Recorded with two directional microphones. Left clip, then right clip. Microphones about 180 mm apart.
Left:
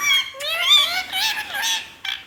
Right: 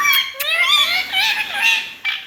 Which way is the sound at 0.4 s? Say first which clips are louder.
Right 1 dB; 30° left (ahead or behind).